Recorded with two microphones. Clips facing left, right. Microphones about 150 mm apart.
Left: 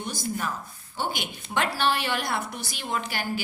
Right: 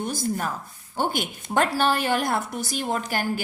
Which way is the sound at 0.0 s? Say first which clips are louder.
Right 4 dB; 50° right (ahead or behind).